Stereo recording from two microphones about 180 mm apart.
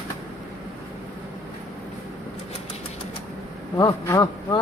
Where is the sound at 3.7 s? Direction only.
15° left (ahead or behind).